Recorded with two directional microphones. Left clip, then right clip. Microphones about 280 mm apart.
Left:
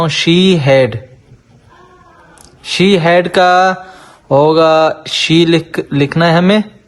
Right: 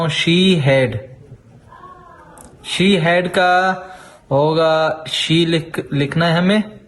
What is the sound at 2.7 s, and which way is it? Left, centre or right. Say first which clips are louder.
Speech: left 6 dB; left.